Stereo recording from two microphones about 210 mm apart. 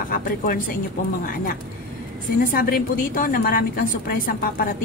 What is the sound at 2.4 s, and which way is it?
A woman's voice, 45° left (ahead or behind).